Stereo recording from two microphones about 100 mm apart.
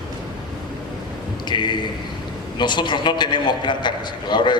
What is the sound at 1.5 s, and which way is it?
A man's voice, 50° left (ahead or behind).